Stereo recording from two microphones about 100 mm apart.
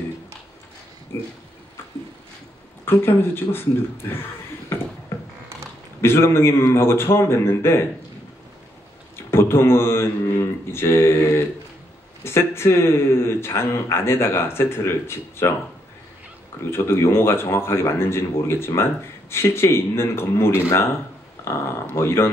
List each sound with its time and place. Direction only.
1.1 s a man's voice: 25° left (ahead or behind)
2.8 s a man's voice: 25° left (ahead or behind)
4.1 s a sound: 20° left (ahead or behind)
5.9 s a man's voice: 25° left (ahead or behind)
9.3 s a man's voice: 25° left (ahead or behind)
16.7 s a man's voice: 25° left (ahead or behind)
21.9 s a man's voice: 25° left (ahead or behind)